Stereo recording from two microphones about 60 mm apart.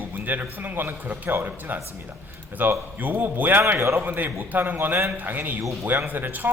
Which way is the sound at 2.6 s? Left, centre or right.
Right.